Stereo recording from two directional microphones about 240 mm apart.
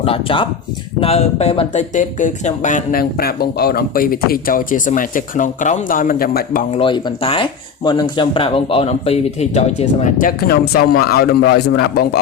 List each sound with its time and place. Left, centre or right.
0.0 s a man's voice: left
6.7 s a man's voice: left